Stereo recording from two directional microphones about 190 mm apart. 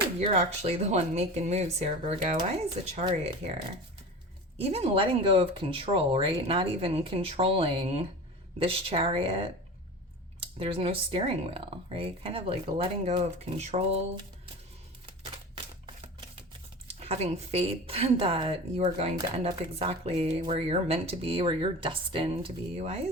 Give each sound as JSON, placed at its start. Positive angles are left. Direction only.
{"t": 0.2, "sound": "speech", "side_deg": -35}
{"t": 4.5, "sound": "speech", "side_deg": -30}
{"t": 17.0, "sound": "speech", "side_deg": -35}